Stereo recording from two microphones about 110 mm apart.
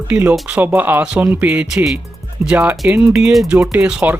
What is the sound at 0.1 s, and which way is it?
Speech, 15° right (ahead or behind).